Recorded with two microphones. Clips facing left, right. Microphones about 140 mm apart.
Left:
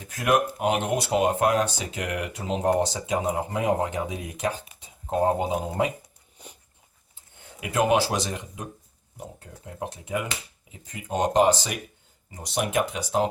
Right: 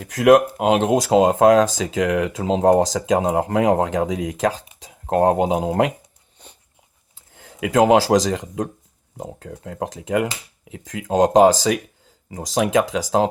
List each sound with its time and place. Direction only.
0.0 s speech: 90° right
6.4 s dog: 10° left (ahead or behind)
7.3 s speech: 90° right